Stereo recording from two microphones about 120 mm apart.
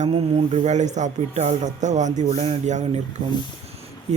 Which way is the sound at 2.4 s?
70° right (ahead or behind).